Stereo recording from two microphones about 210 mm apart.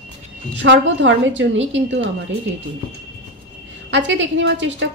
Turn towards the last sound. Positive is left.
turn(degrees=-60)  # may be behind; listen again after turning